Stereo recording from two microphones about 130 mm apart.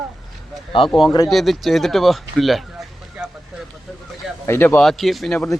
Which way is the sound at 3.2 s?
5° right (ahead or behind).